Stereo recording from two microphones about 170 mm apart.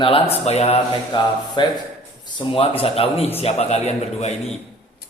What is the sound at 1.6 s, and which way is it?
A man's voice, 30° left (ahead or behind).